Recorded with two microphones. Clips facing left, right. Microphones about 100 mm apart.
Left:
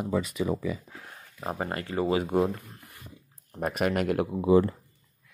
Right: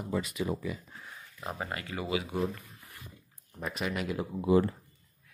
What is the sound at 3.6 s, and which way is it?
Speech, 55° left (ahead or behind).